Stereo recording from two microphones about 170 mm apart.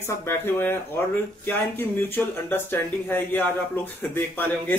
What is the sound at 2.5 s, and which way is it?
Speech, 15° left (ahead or behind).